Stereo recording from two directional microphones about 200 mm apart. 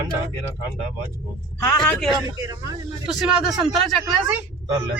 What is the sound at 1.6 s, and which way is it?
A man's voice, 10° left (ahead or behind).